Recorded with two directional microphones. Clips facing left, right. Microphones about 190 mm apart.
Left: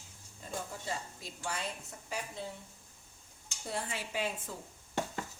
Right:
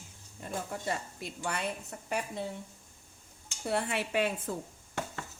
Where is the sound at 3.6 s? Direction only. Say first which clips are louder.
Right 7 dB; 65° right (ahead or behind).